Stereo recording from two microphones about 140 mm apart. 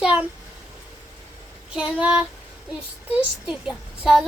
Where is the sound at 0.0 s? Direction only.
5° right (ahead or behind).